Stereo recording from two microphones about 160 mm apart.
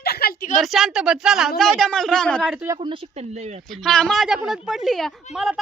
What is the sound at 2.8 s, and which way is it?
Speech, 35° right (ahead or behind).